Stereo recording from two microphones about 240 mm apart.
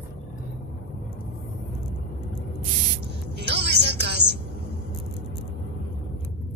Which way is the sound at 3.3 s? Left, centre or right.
Right.